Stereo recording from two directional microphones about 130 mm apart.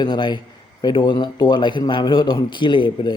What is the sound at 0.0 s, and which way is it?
Speech, 35° left (ahead or behind).